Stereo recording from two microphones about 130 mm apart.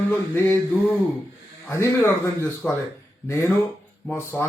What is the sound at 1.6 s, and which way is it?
Speech, 20° left (ahead or behind).